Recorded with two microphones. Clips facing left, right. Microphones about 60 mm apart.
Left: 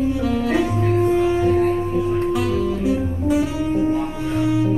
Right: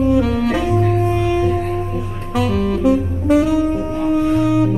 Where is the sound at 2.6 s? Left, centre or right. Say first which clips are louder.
Right 4 dB; right.